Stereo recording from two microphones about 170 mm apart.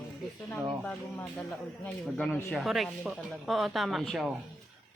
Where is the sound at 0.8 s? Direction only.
10° left (ahead or behind).